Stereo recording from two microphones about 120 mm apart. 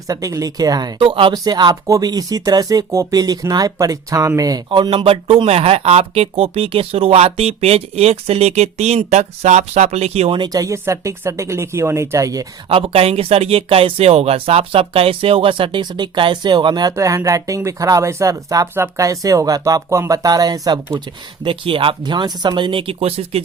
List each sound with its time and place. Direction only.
0.1 s speech: 30° right (ahead or behind); by 10.3 s 60° right (ahead or behind)
10.3 s speech: 35° right (ahead or behind)
12.6 s speech: 50° right (ahead or behind)
16.9 s speech: 25° right (ahead or behind)
21.4 s speech: 45° right (ahead or behind)